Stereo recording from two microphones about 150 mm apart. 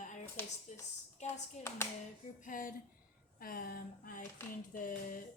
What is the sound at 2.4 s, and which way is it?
Speech, 65° left (ahead or behind).